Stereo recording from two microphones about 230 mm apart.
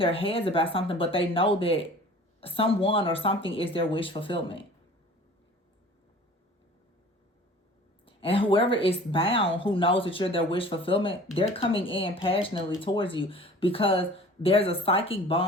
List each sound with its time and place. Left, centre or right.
0.0 s speech: left
8.0 s speech: left